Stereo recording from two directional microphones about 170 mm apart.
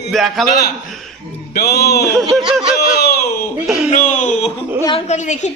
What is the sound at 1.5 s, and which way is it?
Music, 70° left (ahead or behind).